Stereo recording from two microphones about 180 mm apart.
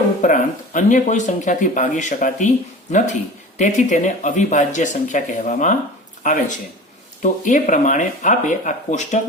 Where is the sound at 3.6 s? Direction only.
45° left (ahead or behind).